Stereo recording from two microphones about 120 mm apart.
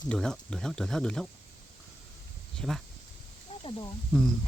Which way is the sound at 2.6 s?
5° left (ahead or behind).